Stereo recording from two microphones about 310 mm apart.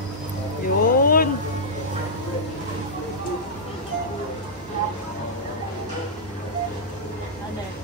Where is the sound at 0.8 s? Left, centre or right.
Left.